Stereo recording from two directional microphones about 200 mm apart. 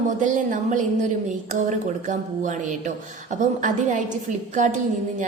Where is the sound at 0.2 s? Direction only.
40° right (ahead or behind).